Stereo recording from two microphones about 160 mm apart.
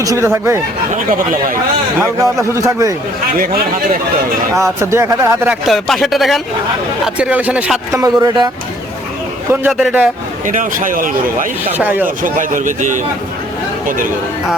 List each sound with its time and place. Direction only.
0.0 s speech: 20° right (ahead or behind)
2.0 s speech: 15° right (ahead or behind)
3.3 s a man's voice: 65° right (ahead or behind)
4.5 s speech: 20° right (ahead or behind)
5.6 s speech: centre (ahead or behind)
7.9 s speech: 25° right (ahead or behind)
9.5 s speech: 5° right (ahead or behind)
10.4 s a man's voice: 55° right (ahead or behind)
11.7 s speech: 10° right (ahead or behind)
12.0 s speech: 55° right (ahead or behind)